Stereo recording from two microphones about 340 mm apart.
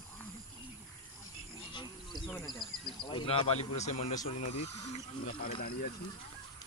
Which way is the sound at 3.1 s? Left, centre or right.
Centre.